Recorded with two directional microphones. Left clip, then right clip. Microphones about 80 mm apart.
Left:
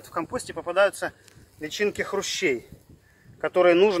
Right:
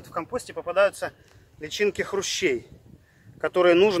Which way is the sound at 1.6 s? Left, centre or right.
Right.